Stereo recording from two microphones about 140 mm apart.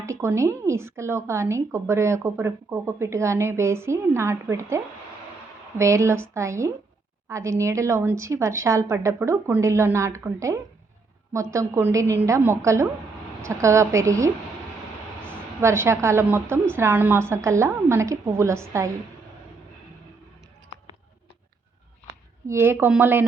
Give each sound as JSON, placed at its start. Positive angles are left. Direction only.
{"t": 0.0, "sound": "speech", "side_deg": -20}
{"t": 15.6, "sound": "a woman's voice", "side_deg": -20}
{"t": 22.4, "sound": "a woman's voice", "side_deg": -20}